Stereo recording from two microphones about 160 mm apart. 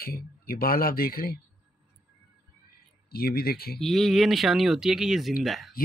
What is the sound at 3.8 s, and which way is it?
Speech, centre (ahead or behind).